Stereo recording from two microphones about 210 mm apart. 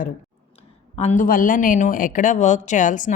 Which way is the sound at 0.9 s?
35° left (ahead or behind).